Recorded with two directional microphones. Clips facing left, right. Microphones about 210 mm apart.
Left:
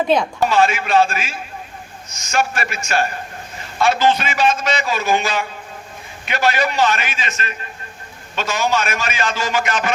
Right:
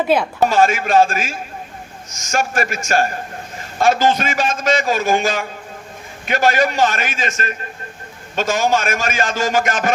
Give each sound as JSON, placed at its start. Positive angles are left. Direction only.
{"t": 0.1, "sound": "speech", "side_deg": -5}
{"t": 0.4, "sound": "a man's voice", "side_deg": -45}